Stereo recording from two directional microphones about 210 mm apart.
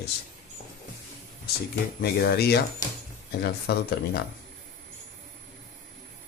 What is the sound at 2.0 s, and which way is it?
Speech, 50° left (ahead or behind).